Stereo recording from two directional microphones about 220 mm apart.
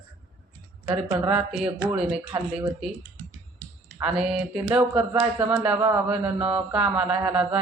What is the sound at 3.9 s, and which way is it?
Speech, 5° right (ahead or behind).